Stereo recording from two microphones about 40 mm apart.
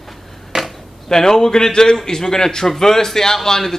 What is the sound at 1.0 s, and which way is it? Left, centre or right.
A man's voice, centre.